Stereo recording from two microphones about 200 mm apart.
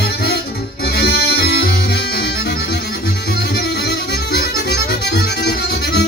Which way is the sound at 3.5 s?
55° left (ahead or behind).